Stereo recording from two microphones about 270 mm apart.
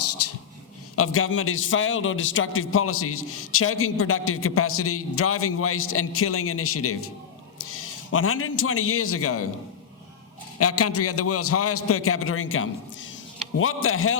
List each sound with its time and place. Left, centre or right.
0.0 s a sound: left
0.9 s a man's voice: left
10.6 s a man's voice: left